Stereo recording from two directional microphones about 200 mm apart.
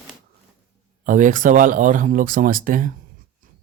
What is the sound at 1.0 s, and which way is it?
Speech, 40° right (ahead or behind).